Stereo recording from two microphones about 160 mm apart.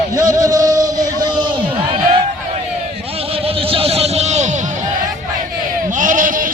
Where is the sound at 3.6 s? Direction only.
35° right (ahead or behind).